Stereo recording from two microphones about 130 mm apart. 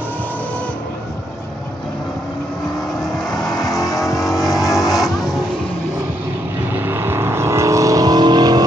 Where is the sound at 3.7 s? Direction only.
25° left (ahead or behind).